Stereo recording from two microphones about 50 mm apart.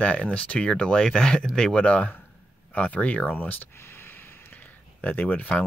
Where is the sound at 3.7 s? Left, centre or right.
Left.